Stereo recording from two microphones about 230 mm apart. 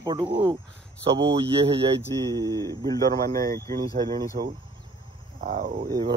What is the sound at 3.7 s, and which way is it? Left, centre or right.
Speech, right.